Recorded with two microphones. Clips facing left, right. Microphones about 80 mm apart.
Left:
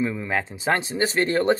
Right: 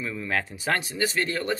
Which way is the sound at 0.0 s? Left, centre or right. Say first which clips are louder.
Left 4 dB; left.